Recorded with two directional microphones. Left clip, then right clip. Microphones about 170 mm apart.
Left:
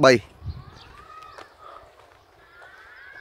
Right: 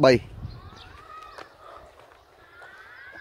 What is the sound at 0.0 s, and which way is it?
Speech, 20° left (ahead or behind).